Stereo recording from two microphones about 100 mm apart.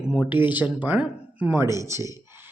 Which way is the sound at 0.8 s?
15° right (ahead or behind).